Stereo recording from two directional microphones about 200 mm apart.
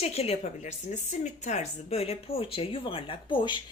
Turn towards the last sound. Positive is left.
turn(degrees=25)  # may be behind; listen again after turning